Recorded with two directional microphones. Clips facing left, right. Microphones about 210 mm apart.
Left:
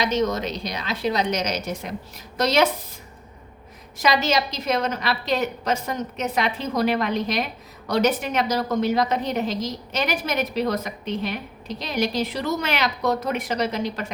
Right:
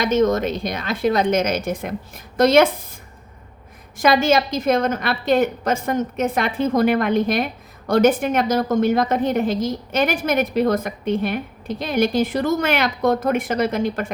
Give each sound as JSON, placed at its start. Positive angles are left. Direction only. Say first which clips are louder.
{"t": 0.0, "sound": "a woman's voice", "louder": "right 5 dB", "side_deg": -50}
{"t": 3.9, "sound": "a woman's voice", "louder": "right 5 dB", "side_deg": -50}